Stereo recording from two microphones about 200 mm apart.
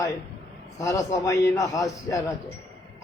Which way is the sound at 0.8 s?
15° left (ahead or behind).